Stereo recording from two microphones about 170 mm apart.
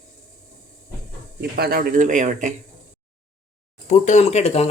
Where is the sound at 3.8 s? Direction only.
45° left (ahead or behind).